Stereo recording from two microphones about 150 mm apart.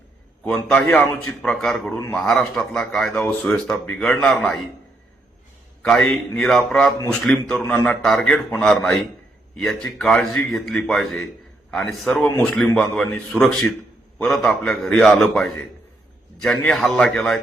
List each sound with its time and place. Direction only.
0.4 s a man's voice: 10° left (ahead or behind)
5.8 s speech: 5° left (ahead or behind)
7.6 s a man's voice: 20° left (ahead or behind)
7.9 s a man's voice: 5° left (ahead or behind)